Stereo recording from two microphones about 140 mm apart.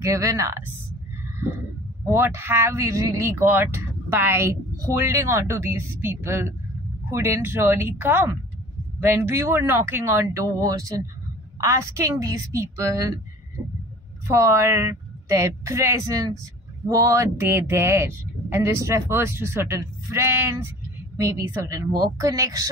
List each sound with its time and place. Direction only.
0.0 s speech: 20° right (ahead or behind)
2.0 s speech: 15° right (ahead or behind)
14.2 s speech: 20° right (ahead or behind)